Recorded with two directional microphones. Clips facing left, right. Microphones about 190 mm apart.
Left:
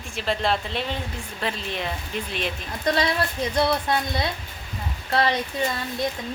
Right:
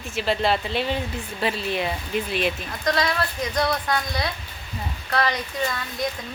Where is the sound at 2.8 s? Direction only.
30° left (ahead or behind).